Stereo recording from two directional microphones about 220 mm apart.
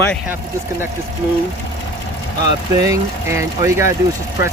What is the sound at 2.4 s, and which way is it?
Speech, 15° right (ahead or behind).